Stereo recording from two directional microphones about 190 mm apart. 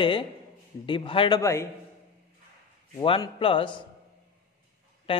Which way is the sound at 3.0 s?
30° left (ahead or behind).